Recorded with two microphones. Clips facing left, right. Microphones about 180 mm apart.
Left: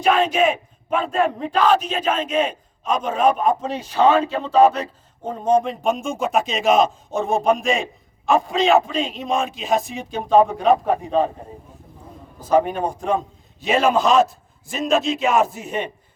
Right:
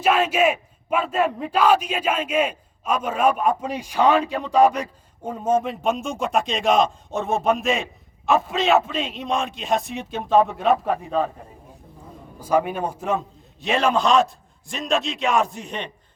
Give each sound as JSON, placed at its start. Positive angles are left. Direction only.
{"t": 0.0, "sound": "a man's voice", "side_deg": -5}
{"t": 10.9, "sound": "a man's voice", "side_deg": 25}
{"t": 12.4, "sound": "a man's voice", "side_deg": -10}